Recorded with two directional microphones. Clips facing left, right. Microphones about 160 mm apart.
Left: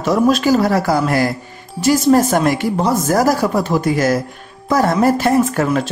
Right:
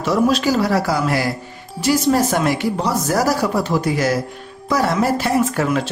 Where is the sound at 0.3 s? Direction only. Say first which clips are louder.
Left 3 dB; 45° left (ahead or behind).